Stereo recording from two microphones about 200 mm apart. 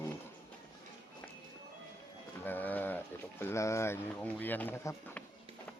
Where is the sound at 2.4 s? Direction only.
10° left (ahead or behind).